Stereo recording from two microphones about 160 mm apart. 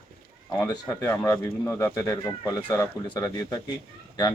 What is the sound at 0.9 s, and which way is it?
Speech, 15° left (ahead or behind).